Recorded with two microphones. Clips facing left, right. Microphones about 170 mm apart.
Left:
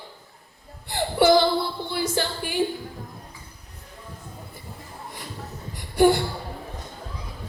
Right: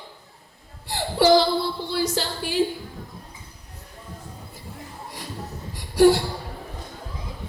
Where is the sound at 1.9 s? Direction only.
55° left (ahead or behind).